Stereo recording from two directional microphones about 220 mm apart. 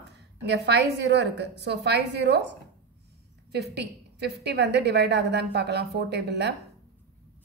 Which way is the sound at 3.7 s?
50° right (ahead or behind).